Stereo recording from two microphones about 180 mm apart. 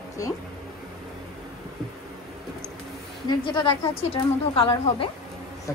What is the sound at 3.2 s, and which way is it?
A woman's voice, 25° left (ahead or behind).